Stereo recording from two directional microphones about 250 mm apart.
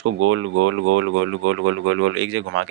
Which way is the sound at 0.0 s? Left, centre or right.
Right.